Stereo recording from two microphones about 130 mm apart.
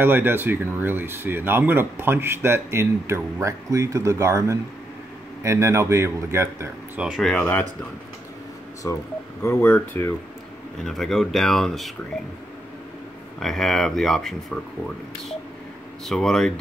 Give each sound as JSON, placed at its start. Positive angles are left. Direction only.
{"t": 0.0, "sound": "speech", "side_deg": -15}
{"t": 7.0, "sound": "speech", "side_deg": 0}
{"t": 8.8, "sound": "speech", "side_deg": 25}
{"t": 10.9, "sound": "speech", "side_deg": 0}
{"t": 13.4, "sound": "speech", "side_deg": 5}
{"t": 16.1, "sound": "speech", "side_deg": 5}